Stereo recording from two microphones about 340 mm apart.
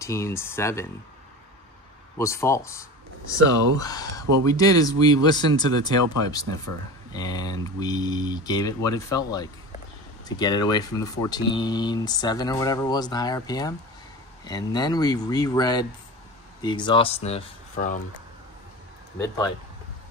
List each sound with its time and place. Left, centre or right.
0.0 s speech: centre
2.1 s speech: centre